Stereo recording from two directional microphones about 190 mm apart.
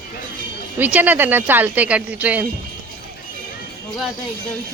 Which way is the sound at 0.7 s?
10° right (ahead or behind).